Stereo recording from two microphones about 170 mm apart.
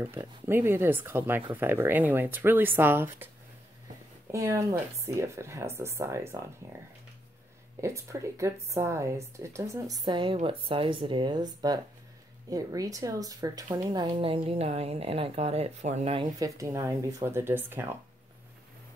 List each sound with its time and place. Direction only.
0.0 s speech: 15° right (ahead or behind)
4.3 s speech: 15° right (ahead or behind)
7.8 s a woman's voice: 15° right (ahead or behind); by 16.3 s 35° right (ahead or behind)
16.3 s speech: 20° right (ahead or behind)